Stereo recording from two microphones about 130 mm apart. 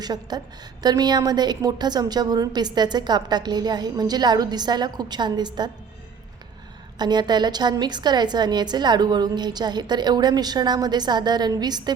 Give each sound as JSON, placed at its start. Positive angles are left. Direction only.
{"t": 0.0, "sound": "a woman's voice", "side_deg": -30}
{"t": 7.0, "sound": "a woman's voice", "side_deg": -35}